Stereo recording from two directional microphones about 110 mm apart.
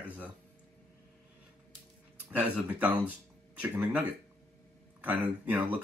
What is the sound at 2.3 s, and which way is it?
Speech, 15° right (ahead or behind).